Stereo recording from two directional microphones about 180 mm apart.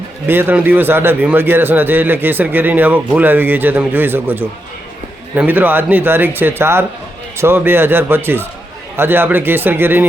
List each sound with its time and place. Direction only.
0.3 s a man's voice: 10° right (ahead or behind)